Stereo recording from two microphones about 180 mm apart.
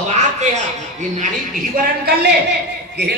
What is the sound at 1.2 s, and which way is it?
A man's voice, 50° right (ahead or behind).